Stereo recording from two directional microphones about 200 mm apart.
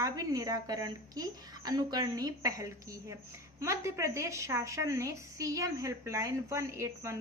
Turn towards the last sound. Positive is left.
turn(degrees=-15)  # may be behind; listen again after turning